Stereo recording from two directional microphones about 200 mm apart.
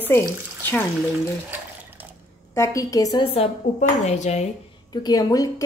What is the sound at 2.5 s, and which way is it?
Speech, 15° left (ahead or behind).